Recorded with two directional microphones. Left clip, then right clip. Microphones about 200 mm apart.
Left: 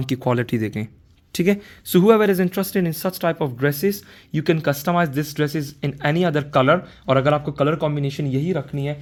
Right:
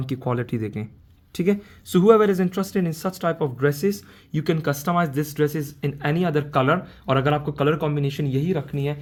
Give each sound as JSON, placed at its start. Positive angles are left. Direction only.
{"t": 0.0, "sound": "speech", "side_deg": 30}